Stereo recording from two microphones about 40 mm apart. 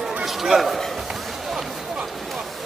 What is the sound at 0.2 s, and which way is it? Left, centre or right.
Speech, centre.